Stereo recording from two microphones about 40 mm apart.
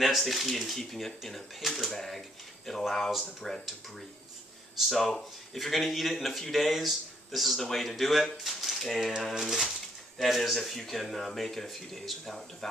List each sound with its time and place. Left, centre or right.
0.0 s speech: centre
4.9 s speech: centre